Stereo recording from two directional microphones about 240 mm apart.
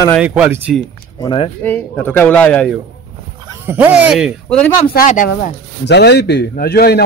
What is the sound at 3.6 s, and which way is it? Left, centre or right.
A man's voice, centre.